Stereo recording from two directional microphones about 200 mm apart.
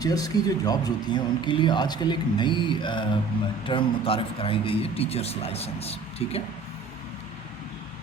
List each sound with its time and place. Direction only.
0.0 s speech: 20° left (ahead or behind)